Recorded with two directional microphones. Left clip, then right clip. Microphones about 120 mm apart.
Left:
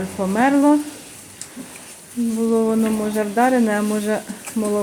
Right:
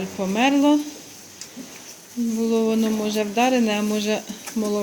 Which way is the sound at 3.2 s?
30° right (ahead or behind).